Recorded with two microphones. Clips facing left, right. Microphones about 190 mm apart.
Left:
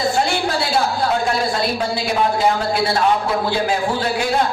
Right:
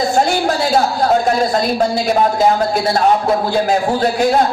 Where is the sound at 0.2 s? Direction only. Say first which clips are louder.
Right 4 dB; 45° right (ahead or behind).